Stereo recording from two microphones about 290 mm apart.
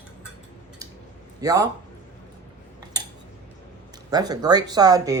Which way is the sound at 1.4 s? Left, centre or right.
Centre.